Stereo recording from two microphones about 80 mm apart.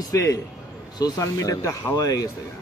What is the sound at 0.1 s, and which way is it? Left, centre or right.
Speech, left.